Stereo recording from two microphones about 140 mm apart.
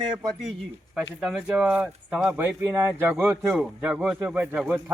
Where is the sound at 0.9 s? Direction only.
5° right (ahead or behind).